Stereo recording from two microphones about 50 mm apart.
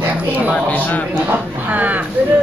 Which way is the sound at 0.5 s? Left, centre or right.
Left.